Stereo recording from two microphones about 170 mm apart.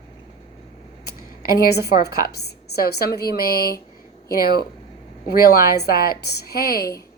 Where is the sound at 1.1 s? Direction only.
60° left (ahead or behind).